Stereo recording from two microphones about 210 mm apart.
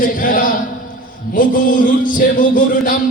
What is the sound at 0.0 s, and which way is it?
Chant, 40° left (ahead or behind).